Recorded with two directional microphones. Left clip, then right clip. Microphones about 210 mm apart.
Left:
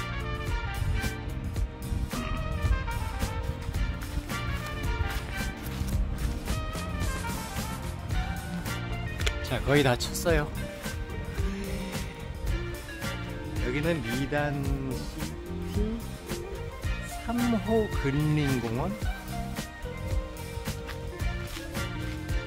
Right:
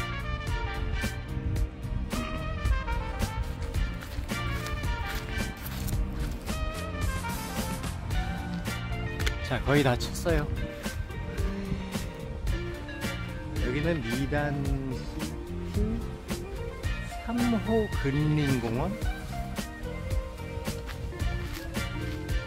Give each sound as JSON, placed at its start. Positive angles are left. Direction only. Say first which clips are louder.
{"t": 9.5, "sound": "speech", "louder": "left 1 dB", "side_deg": 15}
{"t": 13.7, "sound": "speech", "louder": "left 1 dB", "side_deg": 5}
{"t": 17.3, "sound": "speech", "louder": "left 1 dB", "side_deg": 5}